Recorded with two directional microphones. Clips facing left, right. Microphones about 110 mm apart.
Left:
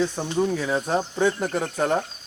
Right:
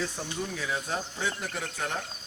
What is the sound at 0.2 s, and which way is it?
Speech, 45° left (ahead or behind).